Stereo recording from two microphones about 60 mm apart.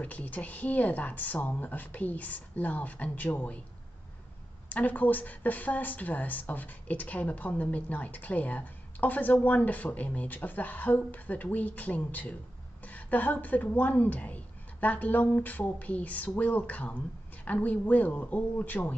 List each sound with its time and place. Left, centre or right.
0.0 s speech: left
4.6 s speech: left